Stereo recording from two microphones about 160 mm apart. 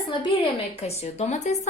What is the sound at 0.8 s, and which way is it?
Speech, 45° left (ahead or behind).